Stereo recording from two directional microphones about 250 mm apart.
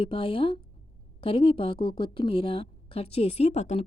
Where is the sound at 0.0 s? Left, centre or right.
Left.